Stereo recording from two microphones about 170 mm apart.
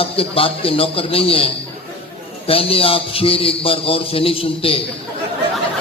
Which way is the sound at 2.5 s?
35° left (ahead or behind).